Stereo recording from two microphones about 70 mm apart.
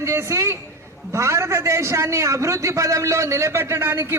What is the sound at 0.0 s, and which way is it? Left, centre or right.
A man's voice, right.